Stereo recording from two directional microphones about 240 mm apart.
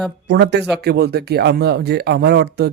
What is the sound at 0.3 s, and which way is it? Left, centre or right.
Speech, right.